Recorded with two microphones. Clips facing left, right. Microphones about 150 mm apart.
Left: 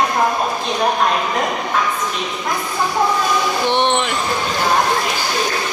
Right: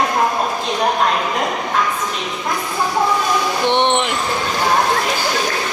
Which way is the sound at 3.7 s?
20° right (ahead or behind).